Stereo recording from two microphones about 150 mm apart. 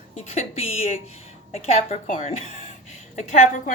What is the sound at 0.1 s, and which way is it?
A woman's voice, 50° left (ahead or behind).